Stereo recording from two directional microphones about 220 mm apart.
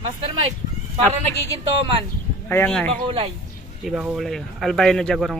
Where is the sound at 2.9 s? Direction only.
25° right (ahead or behind).